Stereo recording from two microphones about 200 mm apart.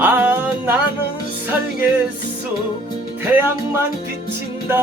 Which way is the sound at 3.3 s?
10° right (ahead or behind).